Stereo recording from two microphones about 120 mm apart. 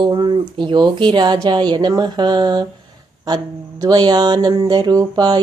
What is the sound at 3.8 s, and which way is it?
Speech, 35° right (ahead or behind).